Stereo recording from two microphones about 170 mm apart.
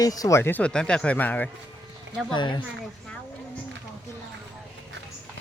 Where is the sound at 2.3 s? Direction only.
25° left (ahead or behind).